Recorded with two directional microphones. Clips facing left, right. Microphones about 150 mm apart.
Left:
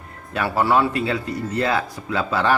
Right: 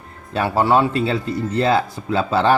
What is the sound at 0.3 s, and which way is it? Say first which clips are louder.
Speech: right 3 dB; 25° right (ahead or behind).